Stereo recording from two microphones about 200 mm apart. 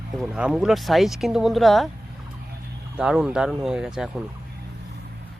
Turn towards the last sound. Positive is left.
turn(degrees=0)  # may be behind; listen again after turning